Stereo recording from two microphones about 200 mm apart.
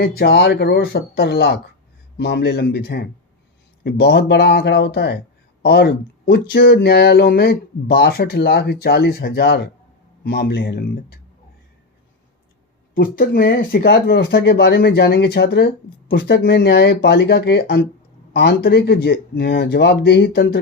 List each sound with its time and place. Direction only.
0.0 s speech: 50° left (ahead or behind)
12.9 s speech: 45° left (ahead or behind)